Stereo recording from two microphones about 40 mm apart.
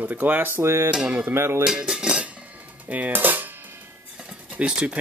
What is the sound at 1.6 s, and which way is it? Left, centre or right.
Speech, centre.